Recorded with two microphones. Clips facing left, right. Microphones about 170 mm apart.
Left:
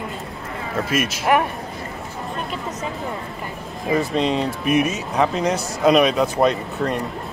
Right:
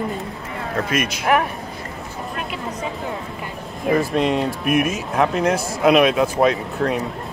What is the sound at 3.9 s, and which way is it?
Speech, 5° right (ahead or behind).